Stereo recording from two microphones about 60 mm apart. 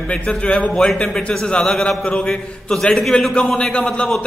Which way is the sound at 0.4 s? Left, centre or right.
Centre.